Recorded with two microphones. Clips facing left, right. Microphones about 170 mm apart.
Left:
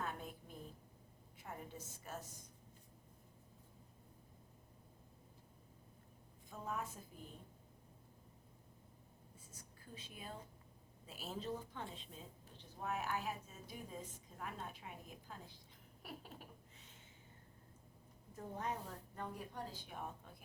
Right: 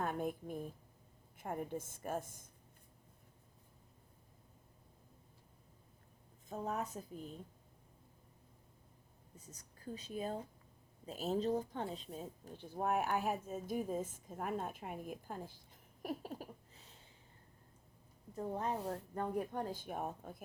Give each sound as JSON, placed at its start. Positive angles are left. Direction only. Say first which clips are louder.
{"t": 0.0, "sound": "a sound", "louder": "right 8 dB", "side_deg": -50}
{"t": 1.4, "sound": "speech", "louder": "right 10 dB", "side_deg": -50}
{"t": 6.5, "sound": "a woman's voice", "louder": "right 5 dB", "side_deg": -40}
{"t": 9.3, "sound": "speech", "louder": "right 6 dB", "side_deg": -40}
{"t": 16.0, "sound": "a sound", "louder": "right 10 dB", "side_deg": -40}
{"t": 18.3, "sound": "a woman's voice", "louder": "right 6 dB", "side_deg": -35}
{"t": 18.8, "sound": "speech", "louder": "right 10 dB", "side_deg": -80}
{"t": 19.1, "sound": "speech", "louder": "right 8 dB", "side_deg": -50}